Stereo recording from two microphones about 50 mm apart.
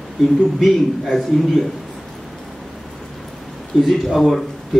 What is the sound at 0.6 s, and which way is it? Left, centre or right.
A man's voice, centre.